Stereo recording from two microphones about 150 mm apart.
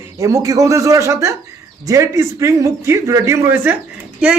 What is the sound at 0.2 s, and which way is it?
A man's voice, 20° right (ahead or behind).